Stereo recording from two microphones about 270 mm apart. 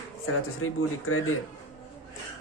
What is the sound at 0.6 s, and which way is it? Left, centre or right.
Speech, left.